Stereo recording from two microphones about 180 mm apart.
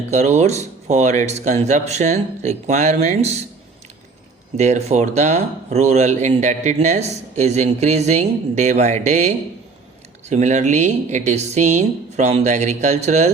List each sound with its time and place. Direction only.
0.1 s speech: 40° right (ahead or behind)
4.5 s speech: 40° right (ahead or behind)